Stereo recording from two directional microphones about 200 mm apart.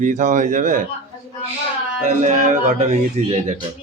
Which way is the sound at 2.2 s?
40° right (ahead or behind).